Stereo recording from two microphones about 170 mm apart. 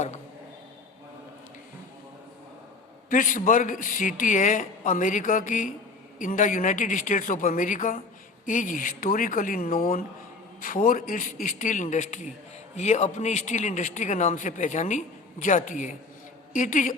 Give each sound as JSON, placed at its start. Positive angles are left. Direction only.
{"t": 3.1, "sound": "a man's voice", "side_deg": 50}